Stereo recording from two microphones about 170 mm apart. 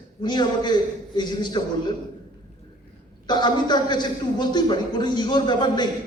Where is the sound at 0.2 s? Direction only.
25° left (ahead or behind).